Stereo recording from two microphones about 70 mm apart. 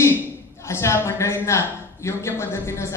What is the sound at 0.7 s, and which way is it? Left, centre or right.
A woman's voice, left.